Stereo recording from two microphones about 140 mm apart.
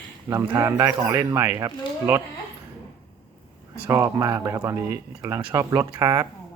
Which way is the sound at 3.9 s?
20° right (ahead or behind).